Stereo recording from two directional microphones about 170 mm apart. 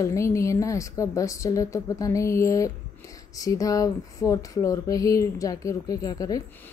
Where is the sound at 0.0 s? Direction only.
20° left (ahead or behind).